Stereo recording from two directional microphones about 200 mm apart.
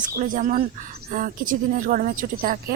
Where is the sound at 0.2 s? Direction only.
40° right (ahead or behind).